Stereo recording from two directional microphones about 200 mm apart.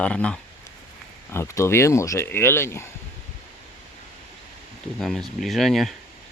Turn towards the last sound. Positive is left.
turn(degrees=0)  # may be behind; listen again after turning